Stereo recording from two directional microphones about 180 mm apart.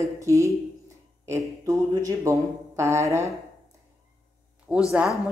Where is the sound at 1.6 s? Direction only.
20° right (ahead or behind).